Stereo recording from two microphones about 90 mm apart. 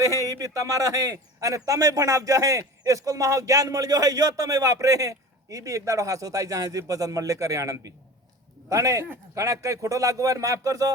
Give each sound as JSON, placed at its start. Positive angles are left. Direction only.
{"t": 0.0, "sound": "a man's voice", "side_deg": -40}